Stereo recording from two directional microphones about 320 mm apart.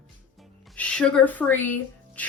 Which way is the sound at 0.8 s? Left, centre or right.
Centre.